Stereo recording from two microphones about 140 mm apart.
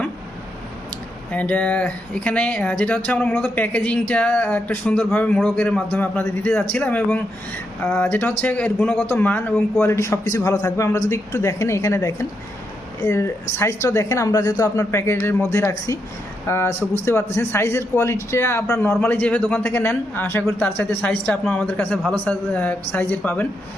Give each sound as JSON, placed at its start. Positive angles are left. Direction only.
{"t": 1.3, "sound": "a woman's voice", "side_deg": 10}